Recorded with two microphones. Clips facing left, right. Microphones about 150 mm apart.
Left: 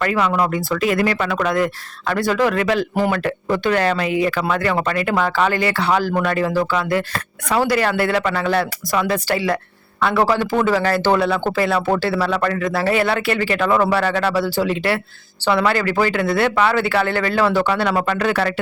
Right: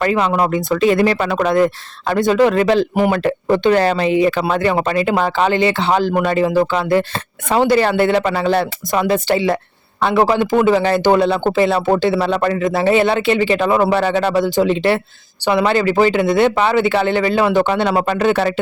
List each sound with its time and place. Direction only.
0.0 s speech: 25° right (ahead or behind)